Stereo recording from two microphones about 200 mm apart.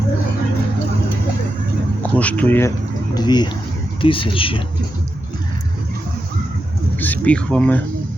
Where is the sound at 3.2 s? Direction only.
20° left (ahead or behind).